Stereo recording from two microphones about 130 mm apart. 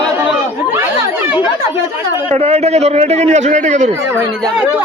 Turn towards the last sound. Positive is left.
turn(degrees=-65)  # may be behind; listen again after turning